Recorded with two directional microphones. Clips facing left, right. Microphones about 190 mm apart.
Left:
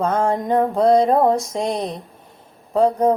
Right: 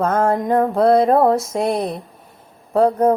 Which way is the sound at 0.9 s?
5° right (ahead or behind).